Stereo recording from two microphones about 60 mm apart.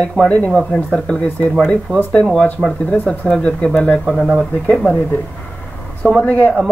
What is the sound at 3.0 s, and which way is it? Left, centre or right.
Speech, centre.